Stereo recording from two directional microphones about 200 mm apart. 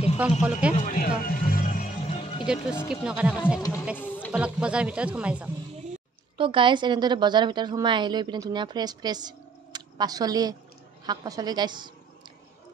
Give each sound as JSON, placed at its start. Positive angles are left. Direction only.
{"t": 0.2, "sound": "speech", "side_deg": -5}
{"t": 0.7, "sound": "a sound", "side_deg": 45}
{"t": 1.2, "sound": "music", "side_deg": 45}
{"t": 2.4, "sound": "speech", "side_deg": -5}
{"t": 3.9, "sound": "speech", "side_deg": 10}
{"t": 4.3, "sound": "speech", "side_deg": -5}
{"t": 6.3, "sound": "a woman's voice", "side_deg": -25}